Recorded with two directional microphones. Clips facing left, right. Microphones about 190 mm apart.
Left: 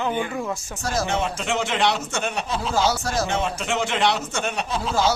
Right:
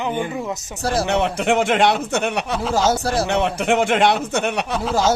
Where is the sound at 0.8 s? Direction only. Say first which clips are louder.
Right 5 dB; 35° right (ahead or behind).